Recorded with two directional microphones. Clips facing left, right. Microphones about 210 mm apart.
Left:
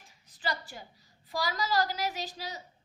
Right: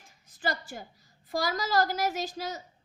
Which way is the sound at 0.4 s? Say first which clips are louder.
Right 3 dB; 45° right (ahead or behind).